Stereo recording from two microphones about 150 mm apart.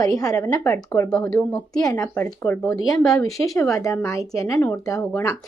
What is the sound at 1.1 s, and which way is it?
Speech, 5° left (ahead or behind).